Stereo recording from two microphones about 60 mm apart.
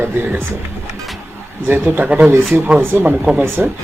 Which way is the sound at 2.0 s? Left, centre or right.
Right.